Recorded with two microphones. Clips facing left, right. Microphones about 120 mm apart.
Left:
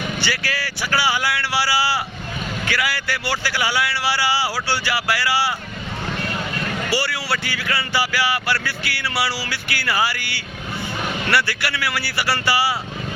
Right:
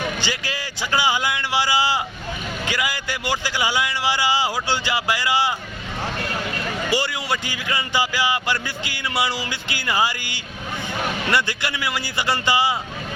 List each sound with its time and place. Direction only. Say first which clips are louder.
0.2 s speech: left 2 dB; 20° right (ahead or behind)
6.9 s speech: right 1 dB; 20° right (ahead or behind)